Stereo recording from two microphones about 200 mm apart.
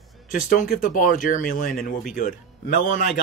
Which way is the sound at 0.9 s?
45° left (ahead or behind).